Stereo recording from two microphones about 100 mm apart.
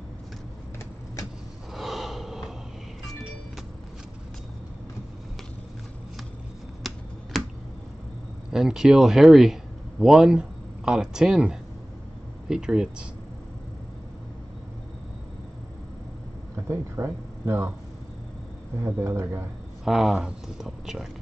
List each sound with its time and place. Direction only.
1.7 s gasp: centre (ahead or behind)
6.8 s finger snapping: centre (ahead or behind)
8.5 s speech: 5° right (ahead or behind)
16.6 s speech: 20° right (ahead or behind)
18.8 s speech: 20° right (ahead or behind)
19.8 s speech: centre (ahead or behind)